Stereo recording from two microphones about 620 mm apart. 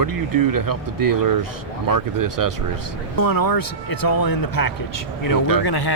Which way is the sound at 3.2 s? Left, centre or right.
Left.